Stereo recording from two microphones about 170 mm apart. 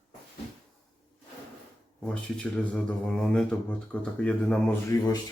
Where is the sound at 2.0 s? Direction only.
5° left (ahead or behind).